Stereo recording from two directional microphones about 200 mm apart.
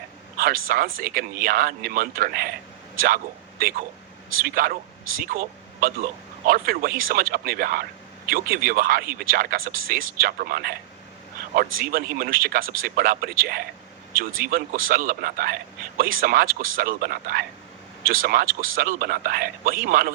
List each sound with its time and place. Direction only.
0.3 s a man's voice: 45° right (ahead or behind)
3.6 s a man's voice: 45° right (ahead or behind)